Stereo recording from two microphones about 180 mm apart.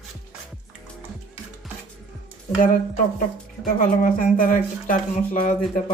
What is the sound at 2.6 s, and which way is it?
Speech, 50° left (ahead or behind).